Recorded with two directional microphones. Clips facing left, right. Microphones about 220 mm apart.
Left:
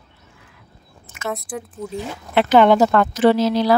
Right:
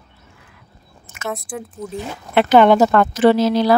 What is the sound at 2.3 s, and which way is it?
A woman's voice, 55° right (ahead or behind).